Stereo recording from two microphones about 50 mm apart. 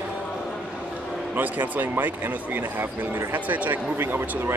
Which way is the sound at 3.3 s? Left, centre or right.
Right.